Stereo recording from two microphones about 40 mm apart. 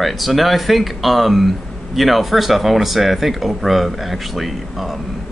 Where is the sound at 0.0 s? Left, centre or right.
Centre.